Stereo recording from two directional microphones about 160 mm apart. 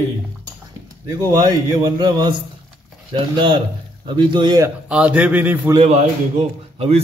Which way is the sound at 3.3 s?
30° right (ahead or behind).